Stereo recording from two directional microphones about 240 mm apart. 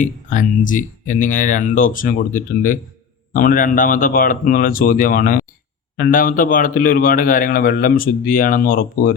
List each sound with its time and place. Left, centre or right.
0.0 s a man's voice: left